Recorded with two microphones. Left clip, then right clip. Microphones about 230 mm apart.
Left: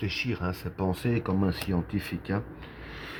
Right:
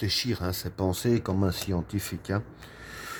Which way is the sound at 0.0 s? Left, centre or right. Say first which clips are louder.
Right 2 dB; right.